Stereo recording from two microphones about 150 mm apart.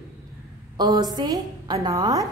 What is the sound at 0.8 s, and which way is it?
A woman's voice, 25° right (ahead or behind).